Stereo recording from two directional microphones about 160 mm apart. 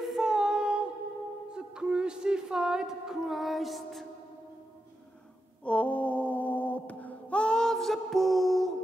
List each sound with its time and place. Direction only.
0.0 s female singing: centre (ahead or behind)
1.5 s music: 5° right (ahead or behind)
5.6 s a sound: 10° left (ahead or behind)